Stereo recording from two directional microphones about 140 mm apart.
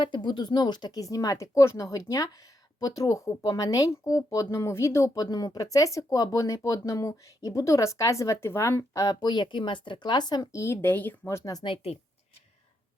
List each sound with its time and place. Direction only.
0.0 s speech: 35° left (ahead or behind)